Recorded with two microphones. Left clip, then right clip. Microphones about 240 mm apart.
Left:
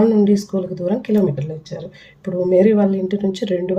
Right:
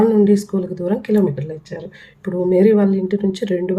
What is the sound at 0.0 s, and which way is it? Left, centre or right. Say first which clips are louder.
Speech: right 1 dB; right.